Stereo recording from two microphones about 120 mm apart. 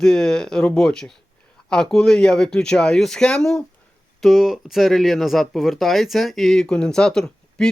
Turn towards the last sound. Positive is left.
turn(degrees=5)  # may be behind; listen again after turning